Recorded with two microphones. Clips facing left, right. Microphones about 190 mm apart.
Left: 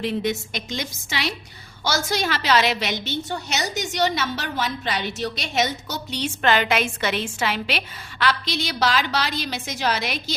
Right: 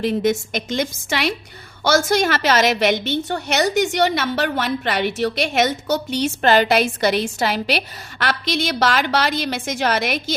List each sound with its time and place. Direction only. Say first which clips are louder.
0.0 s a woman's voice: right 5 dB; 45° right (ahead or behind)